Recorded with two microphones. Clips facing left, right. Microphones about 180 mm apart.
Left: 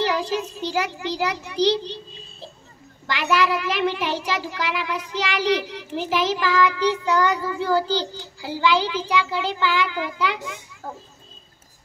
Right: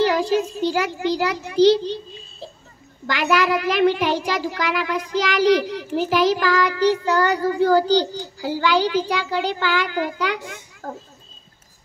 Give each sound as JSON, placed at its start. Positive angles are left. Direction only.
{"t": 0.0, "sound": "a child's voice", "side_deg": -45}
{"t": 3.1, "sound": "a child's voice", "side_deg": -45}